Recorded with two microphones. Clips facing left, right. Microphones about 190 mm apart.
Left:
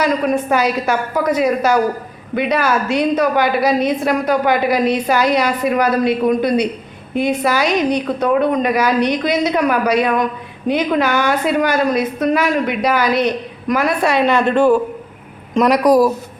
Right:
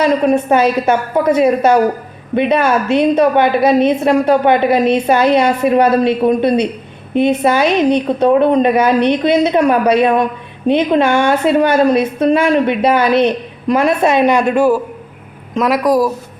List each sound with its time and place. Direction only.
0.0 s a woman's voice: 25° right (ahead or behind); by 16.1 s centre (ahead or behind)